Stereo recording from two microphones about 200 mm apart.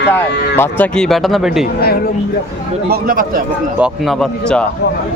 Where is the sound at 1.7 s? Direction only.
50° left (ahead or behind).